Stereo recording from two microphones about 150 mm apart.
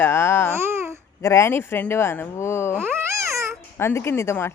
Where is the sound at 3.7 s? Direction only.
15° left (ahead or behind).